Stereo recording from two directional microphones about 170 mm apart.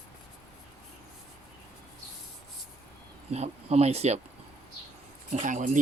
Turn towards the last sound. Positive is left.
turn(degrees=-50)  # may be behind; listen again after turning